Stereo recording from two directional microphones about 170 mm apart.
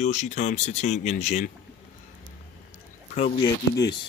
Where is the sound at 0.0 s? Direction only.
45° left (ahead or behind).